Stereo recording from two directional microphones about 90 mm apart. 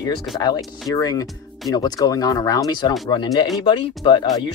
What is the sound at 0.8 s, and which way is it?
Speech, 40° left (ahead or behind).